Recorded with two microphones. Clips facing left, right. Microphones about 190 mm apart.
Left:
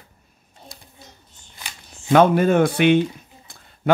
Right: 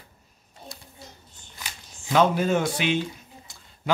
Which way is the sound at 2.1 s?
55° left (ahead or behind).